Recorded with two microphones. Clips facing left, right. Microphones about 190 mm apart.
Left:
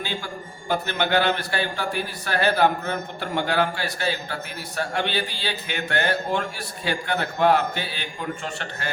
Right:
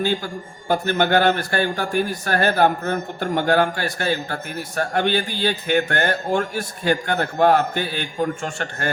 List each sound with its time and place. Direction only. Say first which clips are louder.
0.0 s a man's voice: right 8 dB; 45° right (ahead or behind)